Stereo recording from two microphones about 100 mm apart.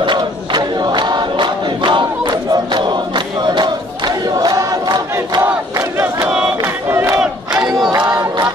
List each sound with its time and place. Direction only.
0.0 s crowd: 50° right (ahead or behind); by 7.2 s 25° right (ahead or behind)
7.2 s battle cry: 5° right (ahead or behind)